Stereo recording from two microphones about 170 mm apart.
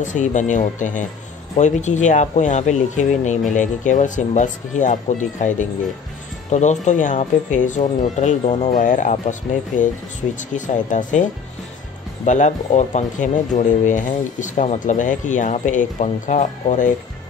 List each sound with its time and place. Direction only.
0.0 s speech: 45° left (ahead or behind)
12.3 s speech: 45° left (ahead or behind)